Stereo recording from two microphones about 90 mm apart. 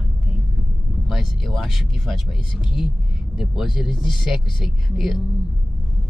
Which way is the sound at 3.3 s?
5° right (ahead or behind).